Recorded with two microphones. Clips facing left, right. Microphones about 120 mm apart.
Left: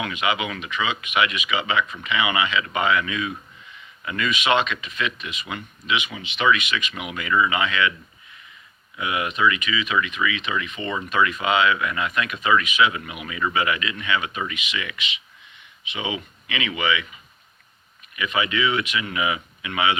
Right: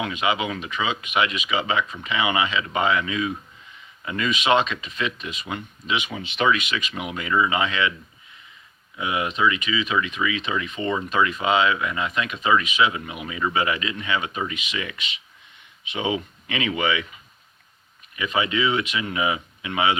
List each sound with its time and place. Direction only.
0.0 s speech: 30° right (ahead or behind)
9.0 s speech: 25° right (ahead or behind)
18.2 s speech: 30° right (ahead or behind)